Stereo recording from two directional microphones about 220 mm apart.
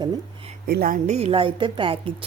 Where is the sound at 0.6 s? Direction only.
40° right (ahead or behind); by 2.0 s 25° right (ahead or behind).